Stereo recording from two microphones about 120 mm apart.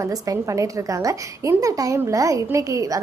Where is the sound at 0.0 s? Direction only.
30° right (ahead or behind).